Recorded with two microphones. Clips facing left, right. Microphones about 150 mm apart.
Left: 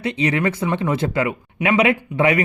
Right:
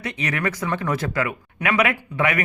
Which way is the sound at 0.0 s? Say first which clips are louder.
Left 6 dB; 30° left (ahead or behind).